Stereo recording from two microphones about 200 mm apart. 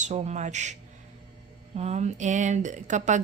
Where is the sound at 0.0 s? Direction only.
35° right (ahead or behind).